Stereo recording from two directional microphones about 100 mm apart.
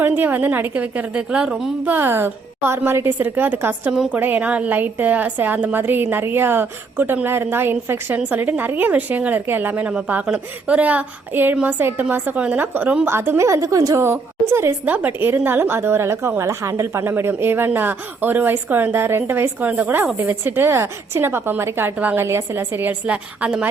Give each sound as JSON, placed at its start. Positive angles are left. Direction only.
{"t": 0.0, "sound": "a woman's voice", "side_deg": -20}
{"t": 1.9, "sound": "a woman's voice", "side_deg": -20}
{"t": 3.9, "sound": "a woman's voice", "side_deg": -5}
{"t": 4.2, "sound": "a woman's voice", "side_deg": -15}